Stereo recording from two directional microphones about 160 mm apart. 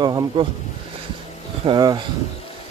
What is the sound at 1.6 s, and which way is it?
Speech, 30° right (ahead or behind).